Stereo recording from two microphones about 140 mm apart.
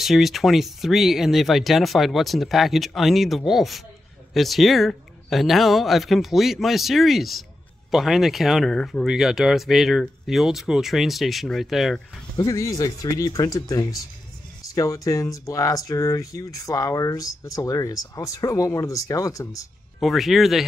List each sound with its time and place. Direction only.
0.0 s speech: centre (ahead or behind)
12.4 s speech: 25° left (ahead or behind)
20.0 s speech: centre (ahead or behind)